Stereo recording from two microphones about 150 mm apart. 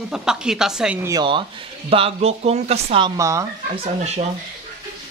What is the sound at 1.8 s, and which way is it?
Speech, 40° right (ahead or behind).